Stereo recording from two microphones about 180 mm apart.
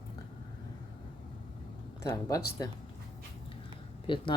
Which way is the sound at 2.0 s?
20° left (ahead or behind).